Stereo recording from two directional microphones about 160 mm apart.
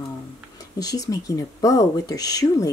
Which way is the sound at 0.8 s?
25° left (ahead or behind).